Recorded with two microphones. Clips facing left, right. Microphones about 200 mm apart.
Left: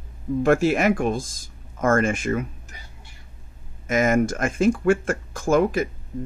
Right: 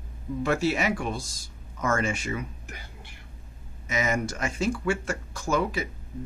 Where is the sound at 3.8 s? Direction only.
50° left (ahead or behind).